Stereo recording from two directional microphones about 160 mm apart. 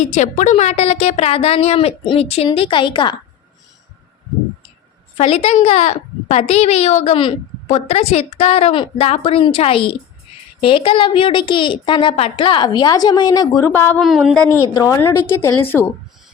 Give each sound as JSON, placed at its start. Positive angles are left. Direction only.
{"t": 0.0, "sound": "a woman's voice", "side_deg": 45}
{"t": 5.1, "sound": "a woman's voice", "side_deg": 40}
{"t": 14.0, "sound": "a woman's voice", "side_deg": 0}
{"t": 14.7, "sound": "a woman's voice", "side_deg": 20}